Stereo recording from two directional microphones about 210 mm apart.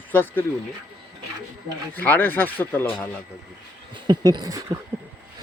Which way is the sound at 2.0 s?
10° left (ahead or behind).